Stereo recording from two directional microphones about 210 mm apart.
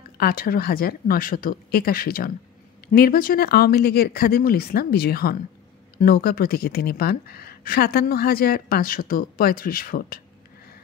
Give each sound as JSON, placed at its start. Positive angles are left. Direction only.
{"t": 0.2, "sound": "speech", "side_deg": 45}